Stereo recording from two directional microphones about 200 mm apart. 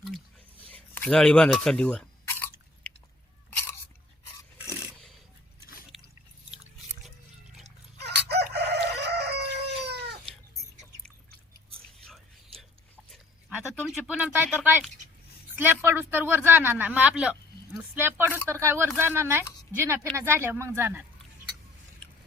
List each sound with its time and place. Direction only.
0.7 s speech: 5° left (ahead or behind)
2.2 s chewing: 10° left (ahead or behind)
4.7 s a sound: 5° right (ahead or behind)
7.9 s crowing: 55° right (ahead or behind)
8.5 s chicken: 55° right (ahead or behind)
13.7 s a sound: centre (ahead or behind)
17.9 s speech: 10° right (ahead or behind)